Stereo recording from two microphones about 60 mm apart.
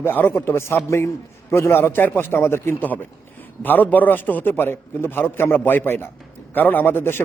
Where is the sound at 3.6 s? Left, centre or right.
Left.